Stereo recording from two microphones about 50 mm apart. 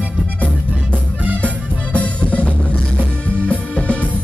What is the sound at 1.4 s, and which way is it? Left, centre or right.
Music, left.